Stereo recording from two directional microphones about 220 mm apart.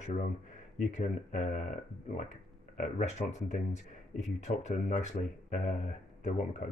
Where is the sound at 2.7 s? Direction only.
30° left (ahead or behind).